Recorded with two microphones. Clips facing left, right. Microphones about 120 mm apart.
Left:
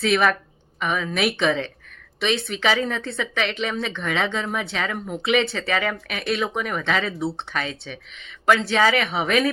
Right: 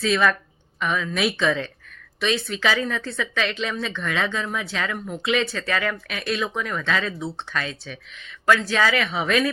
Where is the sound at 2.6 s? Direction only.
20° left (ahead or behind).